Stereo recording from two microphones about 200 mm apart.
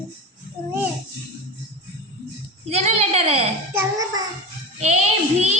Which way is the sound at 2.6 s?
30° right (ahead or behind).